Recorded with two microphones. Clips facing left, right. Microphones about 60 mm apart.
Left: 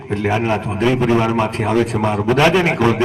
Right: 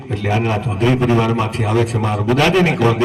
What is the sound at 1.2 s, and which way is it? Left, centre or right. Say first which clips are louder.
Speech: left 1 dB; left.